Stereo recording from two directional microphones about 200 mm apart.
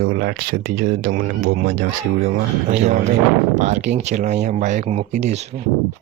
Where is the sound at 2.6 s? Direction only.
35° right (ahead or behind).